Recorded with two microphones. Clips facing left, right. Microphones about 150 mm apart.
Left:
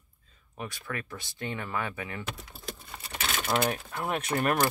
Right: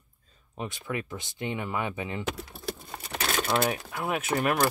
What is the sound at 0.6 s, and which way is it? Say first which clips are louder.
Speech: right 4 dB; 20° right (ahead or behind).